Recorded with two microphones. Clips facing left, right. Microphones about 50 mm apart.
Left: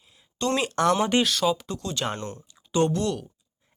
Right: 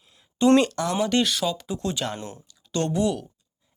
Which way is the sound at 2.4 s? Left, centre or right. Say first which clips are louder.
Left 4 dB; left.